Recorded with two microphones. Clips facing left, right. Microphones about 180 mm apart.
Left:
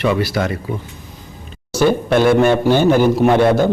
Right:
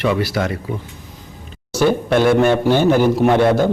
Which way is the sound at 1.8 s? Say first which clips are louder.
Left 1 dB; 20° left (ahead or behind).